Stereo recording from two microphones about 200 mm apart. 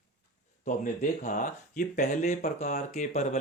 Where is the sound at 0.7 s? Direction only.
40° left (ahead or behind).